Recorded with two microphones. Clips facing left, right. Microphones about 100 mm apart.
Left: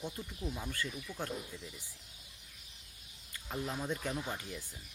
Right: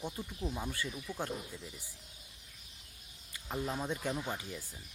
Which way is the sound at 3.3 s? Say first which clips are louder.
Right 2 dB; 20° right (ahead or behind).